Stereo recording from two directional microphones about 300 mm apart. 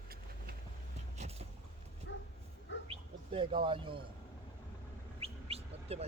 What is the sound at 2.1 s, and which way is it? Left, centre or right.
Bow-wow, left.